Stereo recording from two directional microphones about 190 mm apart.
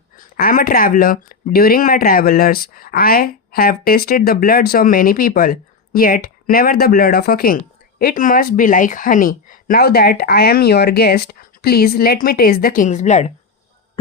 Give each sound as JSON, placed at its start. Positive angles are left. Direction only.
{"t": 0.2, "sound": "speech", "side_deg": 50}